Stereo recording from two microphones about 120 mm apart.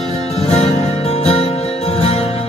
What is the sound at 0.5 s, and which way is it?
Music, 60° left (ahead or behind).